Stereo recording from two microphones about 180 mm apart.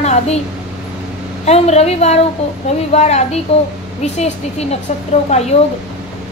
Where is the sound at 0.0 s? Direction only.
40° left (ahead or behind).